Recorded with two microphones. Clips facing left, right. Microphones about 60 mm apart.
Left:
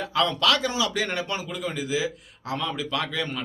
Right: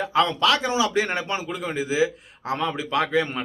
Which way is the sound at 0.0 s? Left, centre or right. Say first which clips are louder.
Right 3 dB; right.